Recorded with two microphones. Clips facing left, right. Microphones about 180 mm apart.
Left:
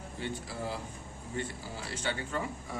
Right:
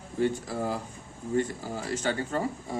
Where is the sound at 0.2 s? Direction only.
45° right (ahead or behind).